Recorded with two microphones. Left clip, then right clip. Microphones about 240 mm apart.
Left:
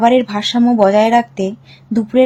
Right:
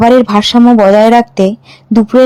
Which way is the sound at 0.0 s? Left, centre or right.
Right.